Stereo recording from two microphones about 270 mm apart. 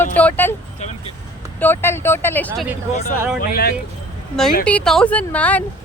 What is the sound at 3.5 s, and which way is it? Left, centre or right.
Speech, left.